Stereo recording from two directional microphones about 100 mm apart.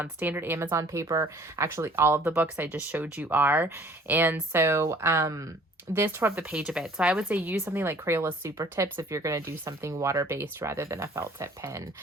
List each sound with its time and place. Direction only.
0.0 s speech: 20° right (ahead or behind)
6.5 s a woman's voice: 10° right (ahead or behind); by 11.8 s 30° right (ahead or behind)